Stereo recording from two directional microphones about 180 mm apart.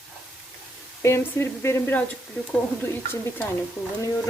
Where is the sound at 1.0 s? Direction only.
15° left (ahead or behind).